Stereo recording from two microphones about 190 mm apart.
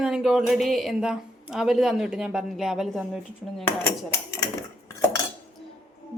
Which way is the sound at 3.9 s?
15° left (ahead or behind).